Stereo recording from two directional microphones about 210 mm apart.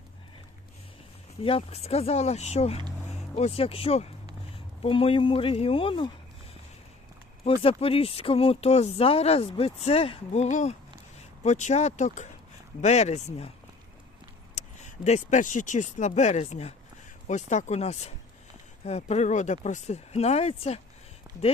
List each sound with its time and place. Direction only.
1.5 s speech: 25° left (ahead or behind)
7.4 s speech: 25° left (ahead or behind)
14.5 s speech: 35° left (ahead or behind)